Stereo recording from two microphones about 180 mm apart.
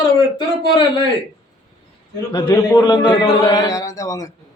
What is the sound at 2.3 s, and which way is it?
A man's voice, 25° left (ahead or behind).